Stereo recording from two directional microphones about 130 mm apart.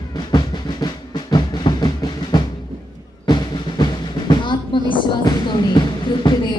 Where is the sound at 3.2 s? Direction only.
35° left (ahead or behind).